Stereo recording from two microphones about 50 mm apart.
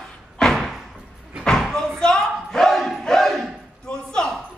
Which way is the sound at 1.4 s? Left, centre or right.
Centre.